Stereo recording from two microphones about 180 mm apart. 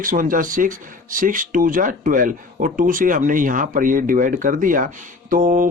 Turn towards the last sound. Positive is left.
turn(degrees=-50)  # may be behind; listen again after turning